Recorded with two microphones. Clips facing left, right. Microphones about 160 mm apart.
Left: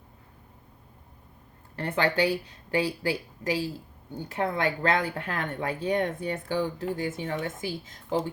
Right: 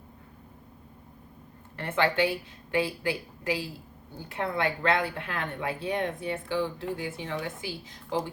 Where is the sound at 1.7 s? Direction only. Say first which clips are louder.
Even; 35° left (ahead or behind).